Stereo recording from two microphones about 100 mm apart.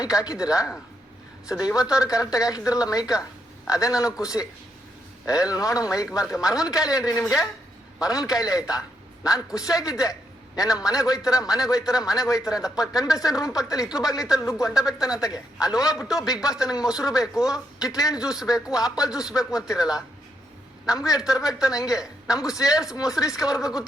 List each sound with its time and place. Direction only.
0.0 s a man's voice: 35° left (ahead or behind)
20.8 s a man's voice: 35° left (ahead or behind)